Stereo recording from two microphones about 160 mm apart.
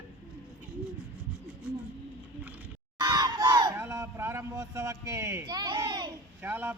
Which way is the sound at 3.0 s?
20° right (ahead or behind).